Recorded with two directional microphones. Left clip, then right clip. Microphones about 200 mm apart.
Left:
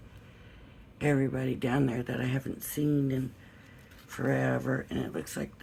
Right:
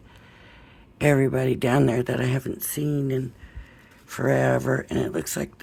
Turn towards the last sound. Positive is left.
turn(degrees=-50)  # may be behind; listen again after turning